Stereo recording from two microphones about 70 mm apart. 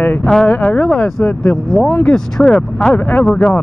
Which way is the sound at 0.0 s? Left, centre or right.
Left.